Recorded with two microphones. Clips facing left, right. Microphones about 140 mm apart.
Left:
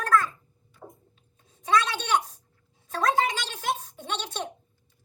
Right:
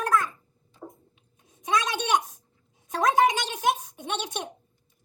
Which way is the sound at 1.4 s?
15° right (ahead or behind).